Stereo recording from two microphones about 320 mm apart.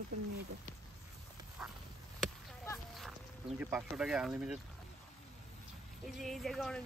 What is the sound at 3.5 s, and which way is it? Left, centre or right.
Speech, centre.